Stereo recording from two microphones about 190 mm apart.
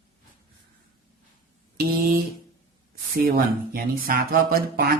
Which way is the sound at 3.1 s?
50° right (ahead or behind).